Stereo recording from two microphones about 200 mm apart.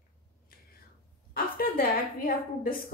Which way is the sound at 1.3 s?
45° left (ahead or behind).